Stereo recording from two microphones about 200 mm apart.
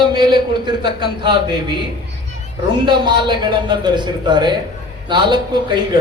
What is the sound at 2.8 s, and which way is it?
A man's voice, 20° right (ahead or behind).